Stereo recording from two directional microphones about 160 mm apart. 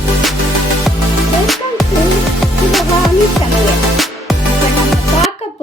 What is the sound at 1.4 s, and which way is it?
Music, centre (ahead or behind).